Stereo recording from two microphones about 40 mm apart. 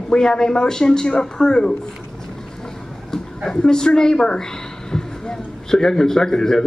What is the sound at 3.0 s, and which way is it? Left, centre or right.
A man's voice, centre.